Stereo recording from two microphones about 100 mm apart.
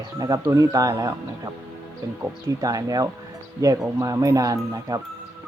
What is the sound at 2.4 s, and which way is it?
Speech, 35° right (ahead or behind).